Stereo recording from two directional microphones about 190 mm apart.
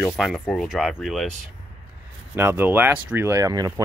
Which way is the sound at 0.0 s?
Centre (ahead or behind).